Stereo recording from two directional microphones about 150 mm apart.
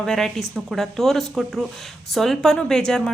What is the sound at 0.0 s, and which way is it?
A woman's voice, 5° left (ahead or behind).